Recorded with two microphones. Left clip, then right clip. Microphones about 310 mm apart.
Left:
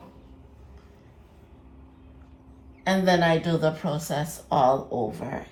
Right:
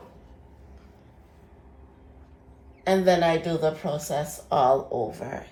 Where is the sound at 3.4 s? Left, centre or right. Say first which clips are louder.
Even; centre.